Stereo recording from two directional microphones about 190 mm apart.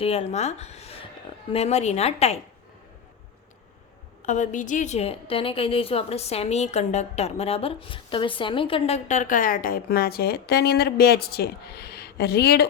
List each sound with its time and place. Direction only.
0.0 s a woman's voice: 30° left (ahead or behind)
4.2 s a woman's voice: 40° left (ahead or behind); by 12.6 s 55° left (ahead or behind)